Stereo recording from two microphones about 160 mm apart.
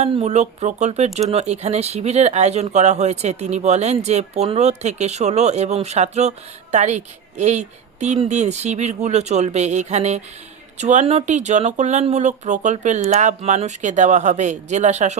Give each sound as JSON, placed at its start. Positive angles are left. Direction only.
{"t": 0.0, "sound": "speech", "side_deg": -45}